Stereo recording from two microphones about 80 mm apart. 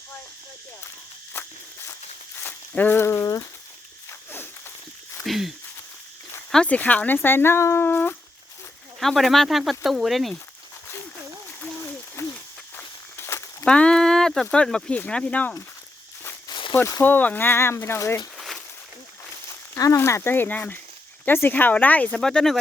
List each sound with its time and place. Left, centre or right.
2.4 s a sound: left
5.2 s speech: centre
6.5 s speech: centre
9.0 s speech: centre
12.2 s a sound: left
12.7 s walk: left
13.7 s speech: centre
16.5 s a sound: left
17.0 s speech: left
18.3 s a sound: centre
19.7 s speech: left
20.0 s speech: left
22.2 s speech: centre